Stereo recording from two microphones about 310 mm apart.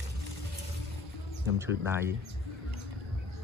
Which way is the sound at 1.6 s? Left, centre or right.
Centre.